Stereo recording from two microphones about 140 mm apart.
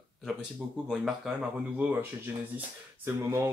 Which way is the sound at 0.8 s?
5° right (ahead or behind).